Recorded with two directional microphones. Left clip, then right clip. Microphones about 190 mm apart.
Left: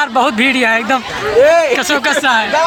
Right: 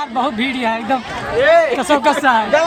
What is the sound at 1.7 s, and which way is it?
Speech, 15° right (ahead or behind).